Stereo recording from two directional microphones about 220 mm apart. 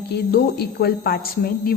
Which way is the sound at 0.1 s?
50° left (ahead or behind).